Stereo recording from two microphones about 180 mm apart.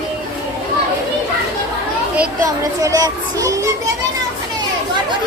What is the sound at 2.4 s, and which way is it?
A child's voice, 20° right (ahead or behind).